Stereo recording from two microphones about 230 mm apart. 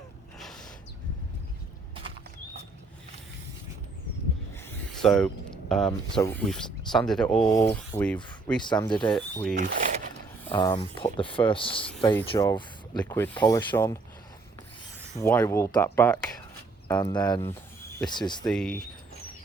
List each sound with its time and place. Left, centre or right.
0.3 s gasp: centre
4.5 s speech: centre
7.3 s speech: centre
8.6 s speech: centre
9.0 s speech: centre
9.8 s a sound: right
10.4 s speech: centre
10.7 s speech: left
13.4 s speech: centre
15.2 s speech: centre
17.0 s speech: centre
18.4 s speech: centre